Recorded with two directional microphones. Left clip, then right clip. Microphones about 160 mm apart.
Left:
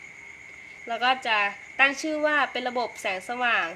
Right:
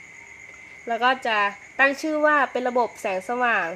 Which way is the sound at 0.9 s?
60° right (ahead or behind).